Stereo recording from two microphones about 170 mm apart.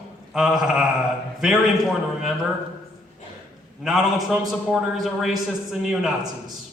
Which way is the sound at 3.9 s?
Centre (ahead or behind).